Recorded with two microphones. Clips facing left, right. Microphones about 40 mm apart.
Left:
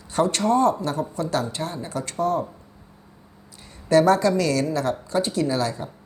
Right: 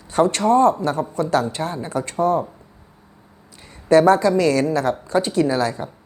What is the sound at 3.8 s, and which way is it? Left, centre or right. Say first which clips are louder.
A woman's voice: right 4 dB; right.